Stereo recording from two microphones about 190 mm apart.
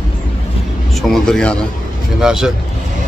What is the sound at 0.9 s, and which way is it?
Speech, centre (ahead or behind).